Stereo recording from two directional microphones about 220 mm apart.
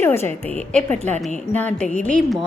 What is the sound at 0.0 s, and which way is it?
A woman's voice, 10° left (ahead or behind).